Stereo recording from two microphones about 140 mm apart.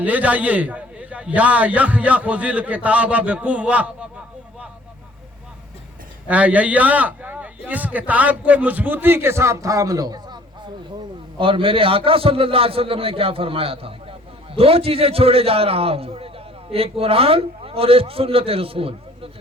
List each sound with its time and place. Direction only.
0.0 s a man's voice: 10° right (ahead or behind)
6.2 s a man's voice: 10° right (ahead or behind); by 19.3 s 40° right (ahead or behind)